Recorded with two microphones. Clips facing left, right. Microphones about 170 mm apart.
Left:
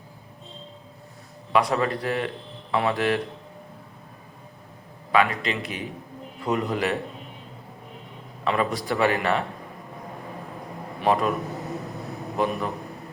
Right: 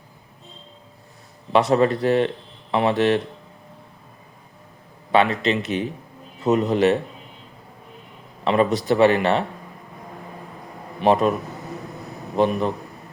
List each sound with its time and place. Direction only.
1.5 s speech: 30° right (ahead or behind)
5.1 s speech: 25° right (ahead or behind)
8.4 s speech: 25° right (ahead or behind)
11.0 s speech: 25° right (ahead or behind)
12.4 s speech: 25° right (ahead or behind)